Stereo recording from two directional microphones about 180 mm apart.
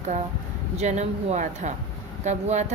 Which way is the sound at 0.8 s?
40° right (ahead or behind).